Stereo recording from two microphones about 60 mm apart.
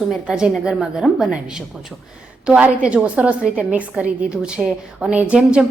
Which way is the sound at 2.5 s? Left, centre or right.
Centre.